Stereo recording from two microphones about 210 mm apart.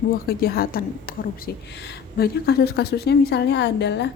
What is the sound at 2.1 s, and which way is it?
A woman's voice, 50° left (ahead or behind).